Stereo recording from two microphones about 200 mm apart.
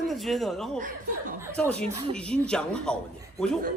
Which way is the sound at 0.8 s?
40° right (ahead or behind).